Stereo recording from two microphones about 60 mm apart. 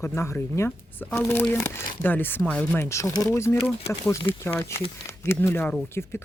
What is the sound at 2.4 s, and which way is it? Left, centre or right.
Speech, left.